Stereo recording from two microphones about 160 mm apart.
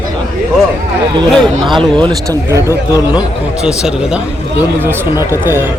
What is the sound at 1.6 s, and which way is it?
Speech, 30° right (ahead or behind).